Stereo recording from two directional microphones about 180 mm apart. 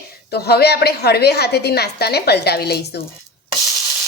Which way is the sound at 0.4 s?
60° left (ahead or behind).